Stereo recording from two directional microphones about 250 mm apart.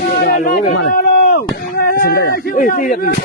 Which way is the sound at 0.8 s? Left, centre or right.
Left.